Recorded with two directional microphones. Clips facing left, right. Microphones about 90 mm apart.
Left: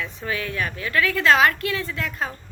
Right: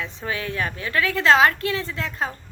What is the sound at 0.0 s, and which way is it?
A woman's voice, 25° right (ahead or behind).